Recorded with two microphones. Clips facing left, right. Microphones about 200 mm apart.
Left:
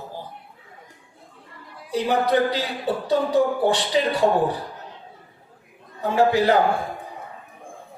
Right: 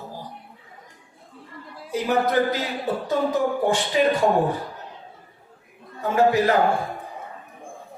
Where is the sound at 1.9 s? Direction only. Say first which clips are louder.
Left 1 dB; 30° left (ahead or behind).